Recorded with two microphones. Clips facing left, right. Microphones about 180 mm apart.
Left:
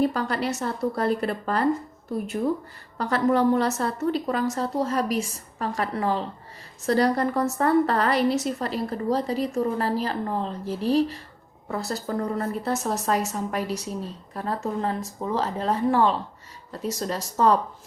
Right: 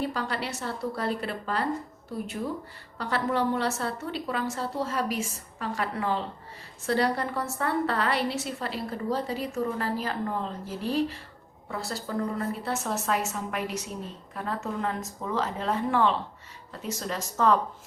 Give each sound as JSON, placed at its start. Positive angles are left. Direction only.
{"t": 0.0, "sound": "a woman's voice", "side_deg": 45}